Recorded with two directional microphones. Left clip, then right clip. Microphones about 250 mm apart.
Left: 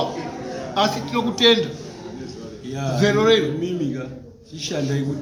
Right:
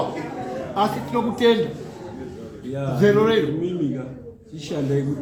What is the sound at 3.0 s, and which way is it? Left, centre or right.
Speech, centre.